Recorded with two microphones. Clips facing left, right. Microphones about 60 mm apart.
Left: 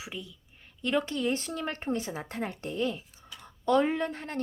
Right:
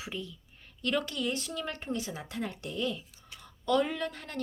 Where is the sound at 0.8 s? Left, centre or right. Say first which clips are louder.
Left 3 dB; left.